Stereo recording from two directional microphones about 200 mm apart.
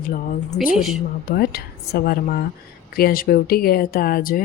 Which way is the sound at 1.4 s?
50° left (ahead or behind).